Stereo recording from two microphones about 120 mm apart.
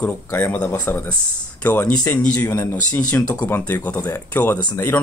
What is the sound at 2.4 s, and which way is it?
Speech, 30° left (ahead or behind).